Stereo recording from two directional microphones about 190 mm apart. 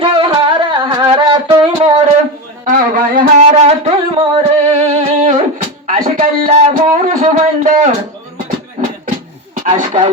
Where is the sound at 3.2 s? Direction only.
40° right (ahead or behind).